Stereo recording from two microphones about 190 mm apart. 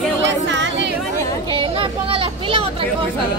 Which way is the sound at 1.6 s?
30° right (ahead or behind).